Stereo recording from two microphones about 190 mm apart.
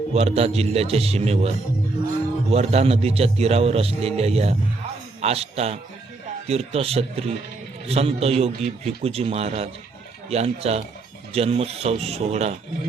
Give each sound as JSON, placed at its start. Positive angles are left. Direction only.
{"t": 0.1, "sound": "a man's voice", "side_deg": -35}
{"t": 2.5, "sound": "a man's voice", "side_deg": -35}